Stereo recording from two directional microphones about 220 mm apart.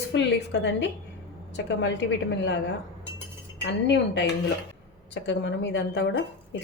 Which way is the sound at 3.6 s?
55° left (ahead or behind).